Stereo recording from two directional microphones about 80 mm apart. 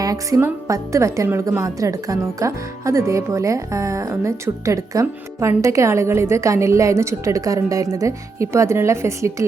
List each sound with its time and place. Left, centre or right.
0.0 s music: right
0.7 s speech: right